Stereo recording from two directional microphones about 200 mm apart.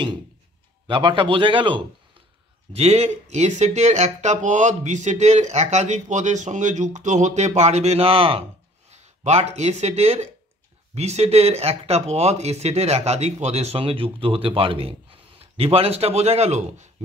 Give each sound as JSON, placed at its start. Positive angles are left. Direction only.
{"t": 0.8, "sound": "a man's voice", "side_deg": -25}